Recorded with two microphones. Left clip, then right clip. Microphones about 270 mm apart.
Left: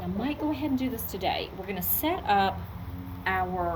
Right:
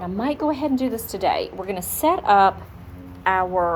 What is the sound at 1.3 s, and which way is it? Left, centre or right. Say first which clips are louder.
A woman's voice: right 8 dB; right.